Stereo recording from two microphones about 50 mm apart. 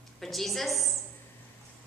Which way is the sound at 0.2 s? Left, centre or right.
Centre.